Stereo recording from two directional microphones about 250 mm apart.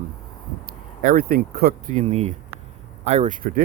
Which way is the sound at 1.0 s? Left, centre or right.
Right.